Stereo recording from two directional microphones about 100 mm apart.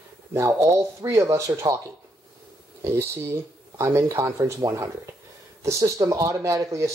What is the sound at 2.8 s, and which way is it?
Speech, 25° right (ahead or behind).